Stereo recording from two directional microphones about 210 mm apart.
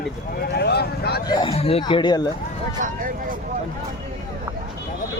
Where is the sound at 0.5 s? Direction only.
50° left (ahead or behind).